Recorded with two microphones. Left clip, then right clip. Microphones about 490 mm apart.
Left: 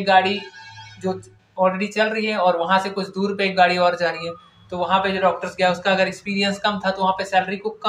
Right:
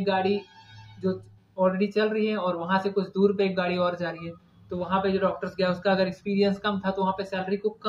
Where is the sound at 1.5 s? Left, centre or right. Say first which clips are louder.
Left 5 dB; right.